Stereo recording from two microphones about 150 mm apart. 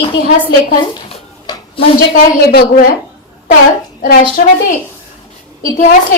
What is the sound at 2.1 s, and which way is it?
Speech, 75° left (ahead or behind).